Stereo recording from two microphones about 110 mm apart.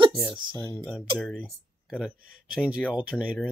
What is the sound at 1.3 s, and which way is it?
Speech, 5° right (ahead or behind).